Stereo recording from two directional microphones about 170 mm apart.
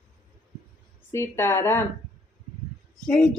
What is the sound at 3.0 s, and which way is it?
Gasp, 5° left (ahead or behind).